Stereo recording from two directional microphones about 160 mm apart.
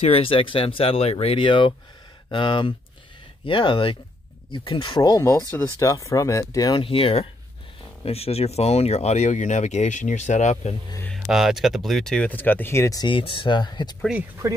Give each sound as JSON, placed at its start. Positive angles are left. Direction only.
{"t": 0.0, "sound": "speech", "side_deg": 35}
{"t": 6.8, "sound": "speech", "side_deg": 35}
{"t": 11.1, "sound": "speech", "side_deg": 0}
{"t": 13.0, "sound": "speech", "side_deg": 30}